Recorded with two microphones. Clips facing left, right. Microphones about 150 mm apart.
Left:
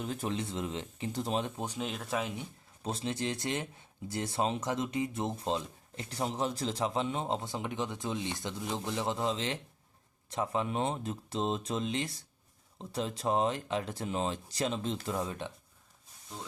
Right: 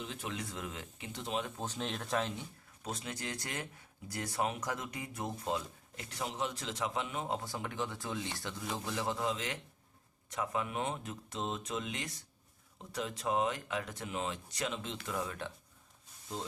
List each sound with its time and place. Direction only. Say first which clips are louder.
0.0 s speech: left 7 dB; 40° left (ahead or behind)
0.3 s speech: left 6 dB; 25° left (ahead or behind)
1.5 s speech: left 2 dB; 10° left (ahead or behind)
2.8 s speech: left 7 dB; 30° left (ahead or behind)